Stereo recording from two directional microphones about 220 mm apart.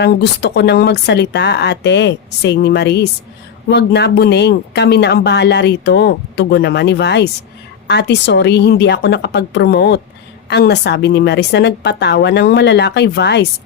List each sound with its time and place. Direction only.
0.0 s speech: 50° left (ahead or behind)